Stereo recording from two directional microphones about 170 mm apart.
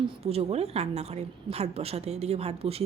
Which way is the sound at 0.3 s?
35° right (ahead or behind).